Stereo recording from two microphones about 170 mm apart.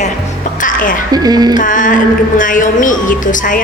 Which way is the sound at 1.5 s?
50° left (ahead or behind).